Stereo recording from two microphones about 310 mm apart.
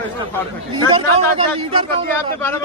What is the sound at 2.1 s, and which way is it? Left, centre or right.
Speech, centre.